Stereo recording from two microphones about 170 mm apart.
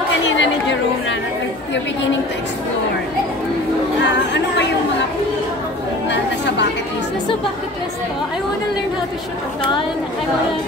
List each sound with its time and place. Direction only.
0.4 s chatter: 90° left
4.0 s chatter: 90° left
6.0 s chatter: 90° left